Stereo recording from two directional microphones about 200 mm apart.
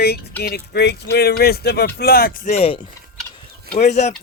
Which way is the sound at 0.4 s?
55° left (ahead or behind).